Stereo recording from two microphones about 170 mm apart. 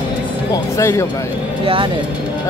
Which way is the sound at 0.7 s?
15° left (ahead or behind).